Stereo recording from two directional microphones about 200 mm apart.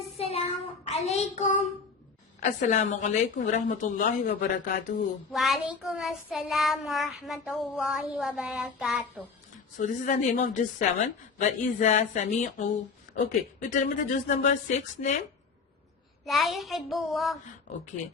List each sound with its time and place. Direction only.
0.2 s child singing: 30° left (ahead or behind)
2.4 s a woman's voice: 35° left (ahead or behind)
5.3 s child singing: centre (ahead or behind)
9.7 s a woman's voice: 40° left (ahead or behind)
16.2 s child singing: centre (ahead or behind)